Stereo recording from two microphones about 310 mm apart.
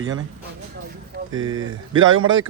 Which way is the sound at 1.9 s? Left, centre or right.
Right.